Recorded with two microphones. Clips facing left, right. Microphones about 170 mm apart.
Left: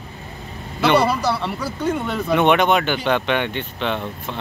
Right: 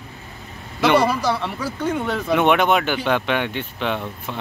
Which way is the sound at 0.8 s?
10° right (ahead or behind).